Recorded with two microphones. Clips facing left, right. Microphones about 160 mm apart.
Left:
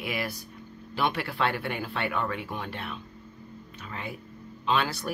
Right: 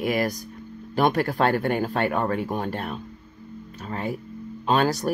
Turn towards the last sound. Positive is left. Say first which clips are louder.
# right 6 dB
turn(degrees=-40)  # may be behind; listen again after turning